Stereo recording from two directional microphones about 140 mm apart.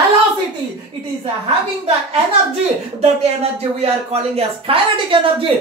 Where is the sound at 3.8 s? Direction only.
45° right (ahead or behind).